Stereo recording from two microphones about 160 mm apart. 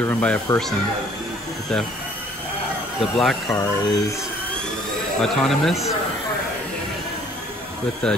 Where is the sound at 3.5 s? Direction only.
20° left (ahead or behind).